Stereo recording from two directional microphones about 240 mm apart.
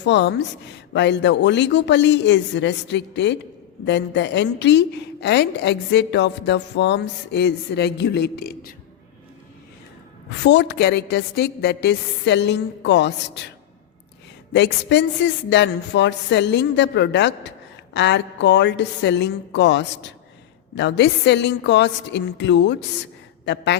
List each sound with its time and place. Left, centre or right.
0.0 s speech: left
10.4 s speech: left
14.5 s speech: left